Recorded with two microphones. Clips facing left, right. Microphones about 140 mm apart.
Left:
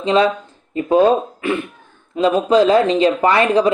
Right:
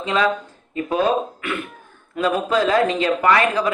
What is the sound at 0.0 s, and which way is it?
Speech, 30° left (ahead or behind).